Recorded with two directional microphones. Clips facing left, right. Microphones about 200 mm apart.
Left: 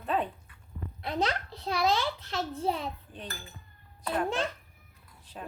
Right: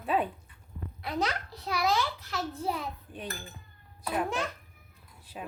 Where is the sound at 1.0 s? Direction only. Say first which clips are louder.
Left 1 dB; 25° left (ahead or behind).